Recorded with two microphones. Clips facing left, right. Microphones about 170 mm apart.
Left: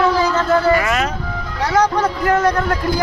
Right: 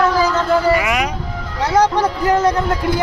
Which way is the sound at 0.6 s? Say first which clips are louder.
Even; 10° right (ahead or behind).